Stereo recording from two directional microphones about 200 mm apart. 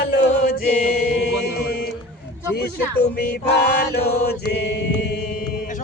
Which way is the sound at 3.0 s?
55° left (ahead or behind).